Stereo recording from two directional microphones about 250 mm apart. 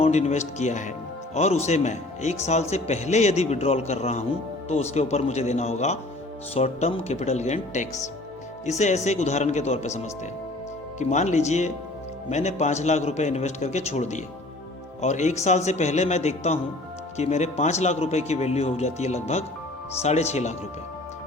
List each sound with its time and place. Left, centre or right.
0.0 s speech: left